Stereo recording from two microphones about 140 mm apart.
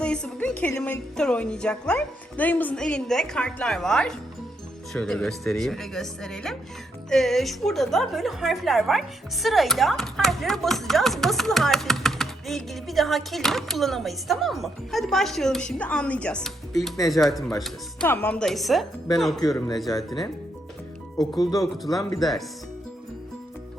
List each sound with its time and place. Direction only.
0.0 s a sound: 5° left (ahead or behind)
0.8 s a woman's voice: 5° left (ahead or behind)
18.0 s a woman's voice: 10° left (ahead or behind)
21.2 s speech: 25° left (ahead or behind)
22.2 s a woman's voice: centre (ahead or behind)